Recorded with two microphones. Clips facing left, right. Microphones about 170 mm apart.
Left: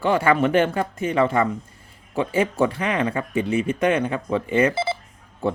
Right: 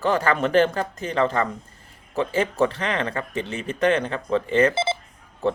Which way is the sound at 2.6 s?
10° left (ahead or behind).